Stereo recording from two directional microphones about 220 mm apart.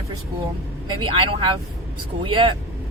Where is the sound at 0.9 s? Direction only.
20° right (ahead or behind).